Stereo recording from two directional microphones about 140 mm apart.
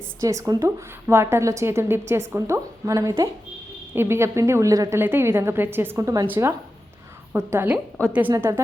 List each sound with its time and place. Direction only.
0.2 s a woman's voice: 20° right (ahead or behind)
8.3 s a woman's voice: 20° right (ahead or behind)